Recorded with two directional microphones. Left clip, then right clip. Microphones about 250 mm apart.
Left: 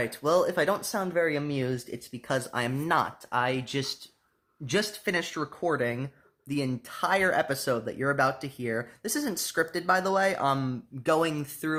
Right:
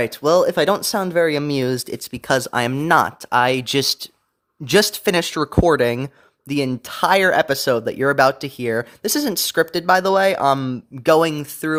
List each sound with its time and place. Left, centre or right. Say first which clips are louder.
0.0 s speech: right 9 dB; right